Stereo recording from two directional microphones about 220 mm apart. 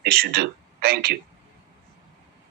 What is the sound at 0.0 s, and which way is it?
Speech, 45° right (ahead or behind).